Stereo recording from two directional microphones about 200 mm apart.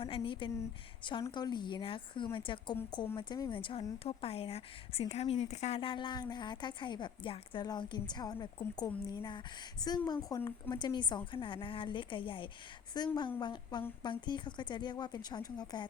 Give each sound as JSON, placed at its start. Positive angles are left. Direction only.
{"t": 0.0, "sound": "a woman's voice", "side_deg": 25}